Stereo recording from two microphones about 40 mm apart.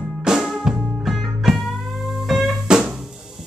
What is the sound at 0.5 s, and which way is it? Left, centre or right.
Music, centre.